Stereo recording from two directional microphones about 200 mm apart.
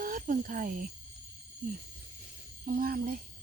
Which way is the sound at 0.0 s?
40° right (ahead or behind).